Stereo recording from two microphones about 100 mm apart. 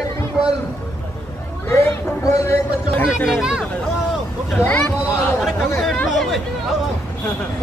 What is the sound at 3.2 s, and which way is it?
Speech, 5° right (ahead or behind).